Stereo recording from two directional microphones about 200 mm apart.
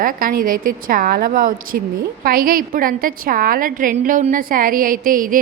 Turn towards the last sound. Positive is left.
turn(degrees=-45)  # may be behind; listen again after turning